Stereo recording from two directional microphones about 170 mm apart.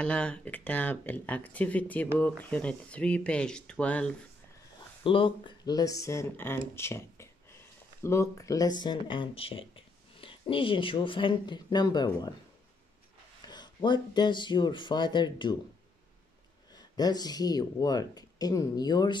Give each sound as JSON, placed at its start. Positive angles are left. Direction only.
{"t": 0.0, "sound": "speech", "side_deg": 5}
{"t": 5.0, "sound": "speech", "side_deg": 30}
{"t": 13.5, "sound": "speech", "side_deg": 25}
{"t": 16.7, "sound": "speech", "side_deg": 25}